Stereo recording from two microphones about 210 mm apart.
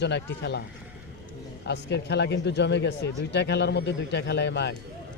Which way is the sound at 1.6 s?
55° left (ahead or behind).